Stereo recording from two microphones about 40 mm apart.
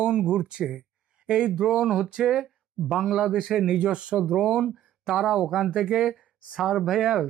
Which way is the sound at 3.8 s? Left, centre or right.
Right.